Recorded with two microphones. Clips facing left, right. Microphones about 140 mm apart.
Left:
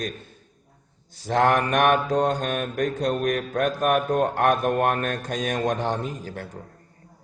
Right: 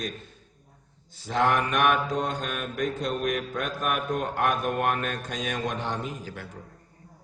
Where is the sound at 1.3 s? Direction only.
50° left (ahead or behind).